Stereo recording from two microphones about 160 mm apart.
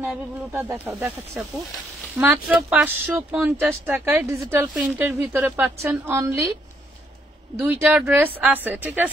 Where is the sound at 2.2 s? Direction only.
10° right (ahead or behind).